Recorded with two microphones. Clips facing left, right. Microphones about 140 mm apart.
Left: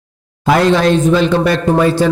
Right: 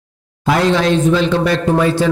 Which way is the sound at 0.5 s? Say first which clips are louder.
Left 3 dB; 50° left (ahead or behind).